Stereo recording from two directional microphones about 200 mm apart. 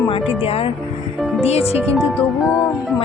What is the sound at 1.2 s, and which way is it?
Music, centre (ahead or behind).